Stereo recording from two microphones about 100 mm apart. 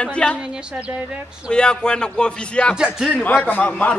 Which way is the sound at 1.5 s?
10° left (ahead or behind).